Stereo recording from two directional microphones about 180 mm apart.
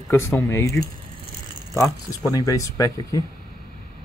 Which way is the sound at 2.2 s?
20° left (ahead or behind).